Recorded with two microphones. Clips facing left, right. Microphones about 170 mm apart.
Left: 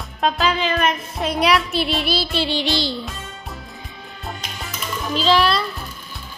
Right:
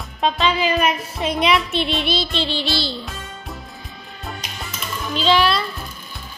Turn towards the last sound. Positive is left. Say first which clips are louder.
# even
turn(degrees=0)  # may be behind; listen again after turning